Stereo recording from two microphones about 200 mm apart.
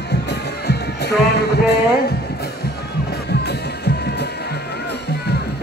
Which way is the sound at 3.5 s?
55° left (ahead or behind).